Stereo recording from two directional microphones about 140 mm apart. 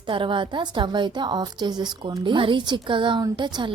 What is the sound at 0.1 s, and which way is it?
A woman's voice, 35° right (ahead or behind).